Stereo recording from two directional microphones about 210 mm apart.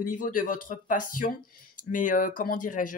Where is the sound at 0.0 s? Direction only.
40° left (ahead or behind).